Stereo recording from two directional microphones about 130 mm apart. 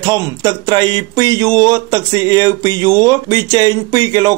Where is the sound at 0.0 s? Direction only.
30° right (ahead or behind).